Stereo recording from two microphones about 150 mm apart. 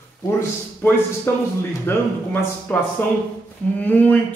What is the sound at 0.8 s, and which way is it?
Speech, 15° left (ahead or behind).